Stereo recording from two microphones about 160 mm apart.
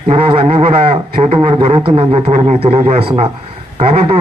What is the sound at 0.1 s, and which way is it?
Speech, 40° right (ahead or behind).